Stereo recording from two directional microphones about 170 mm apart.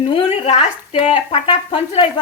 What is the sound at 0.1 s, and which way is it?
Speech, 35° left (ahead or behind).